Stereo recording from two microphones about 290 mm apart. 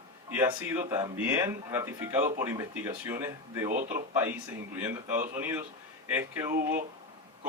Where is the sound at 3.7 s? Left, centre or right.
Right.